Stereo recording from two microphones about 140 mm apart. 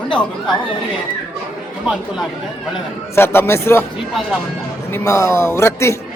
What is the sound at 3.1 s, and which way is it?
Speech, 15° left (ahead or behind).